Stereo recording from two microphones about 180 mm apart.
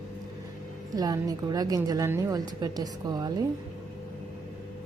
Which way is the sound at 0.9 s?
20° right (ahead or behind).